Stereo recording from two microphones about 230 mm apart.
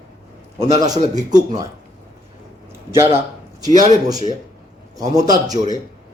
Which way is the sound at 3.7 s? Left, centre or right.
Right.